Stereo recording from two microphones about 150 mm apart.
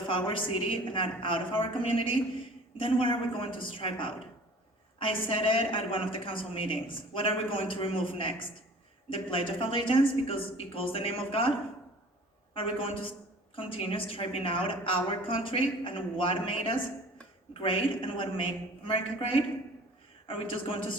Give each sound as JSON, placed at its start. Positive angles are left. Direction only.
{"t": 0.1, "sound": "a woman's voice", "side_deg": 35}
{"t": 12.5, "sound": "a woman's voice", "side_deg": 35}
{"t": 20.2, "sound": "a woman's voice", "side_deg": 35}